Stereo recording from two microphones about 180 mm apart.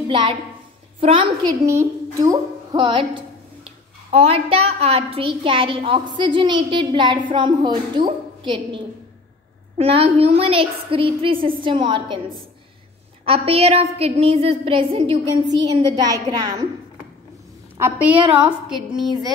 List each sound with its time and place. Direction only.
0.1 s a woman's voice: 30° right (ahead or behind)
1.7 s a woman's voice: 15° right (ahead or behind)
13.2 s a woman's voice: 35° right (ahead or behind)
15.2 s a woman's voice: 90° right
15.6 s a woman's voice: 20° right (ahead or behind)
17.7 s a woman's voice: 10° right (ahead or behind)